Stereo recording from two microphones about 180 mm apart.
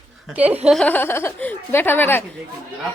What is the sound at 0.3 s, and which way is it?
Speech, 10° right (ahead or behind).